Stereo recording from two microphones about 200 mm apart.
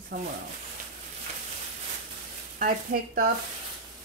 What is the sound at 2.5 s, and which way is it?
Speech, 45° right (ahead or behind).